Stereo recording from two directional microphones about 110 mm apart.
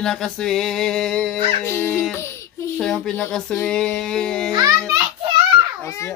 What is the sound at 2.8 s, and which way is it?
Speech, 5° left (ahead or behind).